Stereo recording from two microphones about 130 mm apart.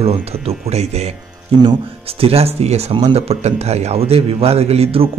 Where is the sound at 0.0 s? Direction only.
50° right (ahead or behind).